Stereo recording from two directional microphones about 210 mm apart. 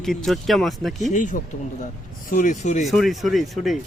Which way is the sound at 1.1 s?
35° left (ahead or behind).